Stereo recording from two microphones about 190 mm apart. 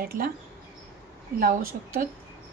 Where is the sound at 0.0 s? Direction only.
50° right (ahead or behind).